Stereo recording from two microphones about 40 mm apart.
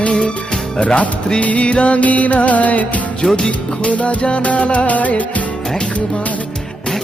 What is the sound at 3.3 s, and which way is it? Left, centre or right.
Music, left.